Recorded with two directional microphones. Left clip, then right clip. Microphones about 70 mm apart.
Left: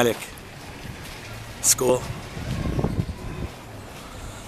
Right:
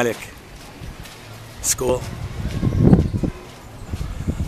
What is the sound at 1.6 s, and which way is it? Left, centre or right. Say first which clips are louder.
Speech: even; centre.